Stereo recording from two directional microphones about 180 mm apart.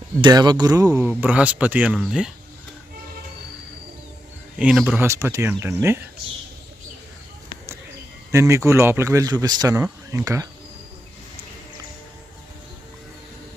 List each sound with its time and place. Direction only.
0.2 s speech: 25° right (ahead or behind); by 2.3 s 5° right (ahead or behind)
4.5 s speech: 5° right (ahead or behind)
4.9 s speech: 15° right (ahead or behind)
8.3 s speech: 15° right (ahead or behind)